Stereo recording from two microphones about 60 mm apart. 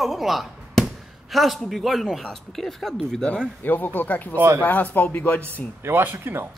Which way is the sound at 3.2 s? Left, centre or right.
Centre.